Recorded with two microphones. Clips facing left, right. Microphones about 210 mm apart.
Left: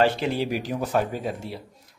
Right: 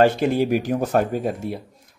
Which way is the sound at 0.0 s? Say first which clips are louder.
Right 5 dB; 45° right (ahead or behind).